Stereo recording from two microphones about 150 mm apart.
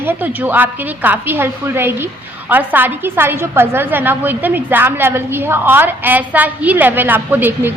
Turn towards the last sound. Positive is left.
turn(degrees=-15)  # may be behind; listen again after turning